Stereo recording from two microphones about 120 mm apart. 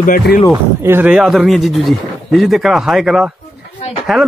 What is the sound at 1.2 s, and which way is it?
Speech, centre (ahead or behind).